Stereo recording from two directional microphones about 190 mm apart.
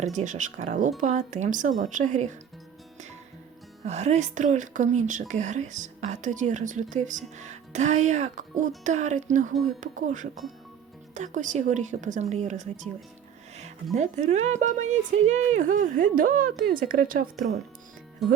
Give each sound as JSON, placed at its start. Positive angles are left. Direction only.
{"t": 0.0, "sound": "speech", "side_deg": -40}
{"t": 3.8, "sound": "speech", "side_deg": -35}
{"t": 13.9, "sound": "speech", "side_deg": -35}
{"t": 18.2, "sound": "speech", "side_deg": 0}